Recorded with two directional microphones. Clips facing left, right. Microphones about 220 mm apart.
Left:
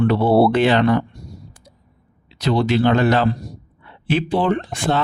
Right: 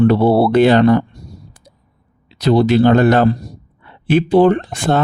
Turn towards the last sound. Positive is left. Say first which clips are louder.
# right 4 dB
turn(degrees=-45)  # may be behind; listen again after turning